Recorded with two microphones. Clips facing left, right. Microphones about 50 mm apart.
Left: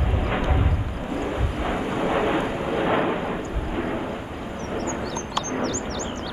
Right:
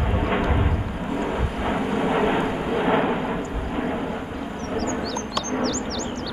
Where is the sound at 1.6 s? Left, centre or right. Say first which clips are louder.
Right 2 dB; centre.